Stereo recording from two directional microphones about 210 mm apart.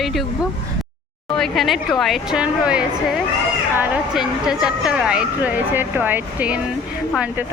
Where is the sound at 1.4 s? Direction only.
Centre (ahead or behind).